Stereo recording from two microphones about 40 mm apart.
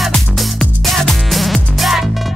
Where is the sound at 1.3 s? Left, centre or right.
Centre.